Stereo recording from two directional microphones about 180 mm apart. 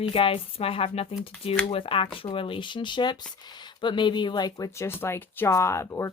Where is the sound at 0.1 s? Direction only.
30° left (ahead or behind).